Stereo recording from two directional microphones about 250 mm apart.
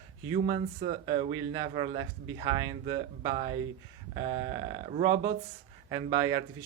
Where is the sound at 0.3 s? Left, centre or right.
Right.